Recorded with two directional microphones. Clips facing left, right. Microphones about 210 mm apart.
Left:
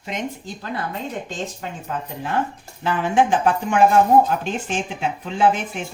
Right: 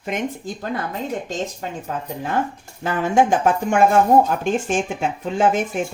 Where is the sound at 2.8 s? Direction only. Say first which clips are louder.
Right 1 dB; 45° right (ahead or behind).